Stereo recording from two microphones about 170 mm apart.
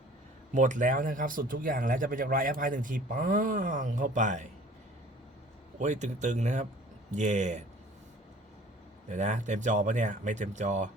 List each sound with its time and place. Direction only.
0.5 s speech: 50° right (ahead or behind)
5.8 s speech: 45° right (ahead or behind)
9.0 s speech: 45° right (ahead or behind)